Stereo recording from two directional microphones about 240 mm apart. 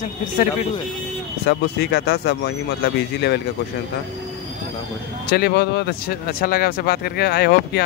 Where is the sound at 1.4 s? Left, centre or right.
Left.